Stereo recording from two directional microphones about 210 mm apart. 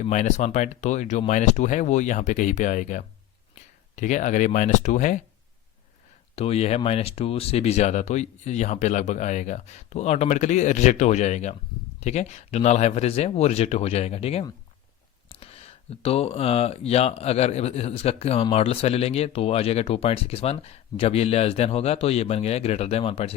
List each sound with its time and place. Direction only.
0.0 s speech: 35° left (ahead or behind)
6.3 s speech: 30° left (ahead or behind)